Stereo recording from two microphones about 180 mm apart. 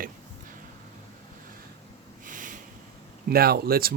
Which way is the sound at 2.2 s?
45° right (ahead or behind).